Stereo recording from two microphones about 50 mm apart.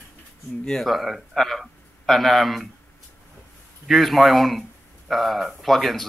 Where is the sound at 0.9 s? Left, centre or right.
Centre.